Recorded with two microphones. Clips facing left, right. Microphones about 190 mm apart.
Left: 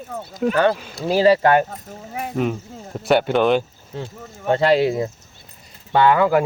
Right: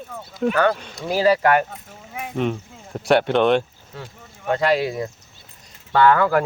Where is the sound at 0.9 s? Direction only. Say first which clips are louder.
Left 5 dB; 30° left (ahead or behind).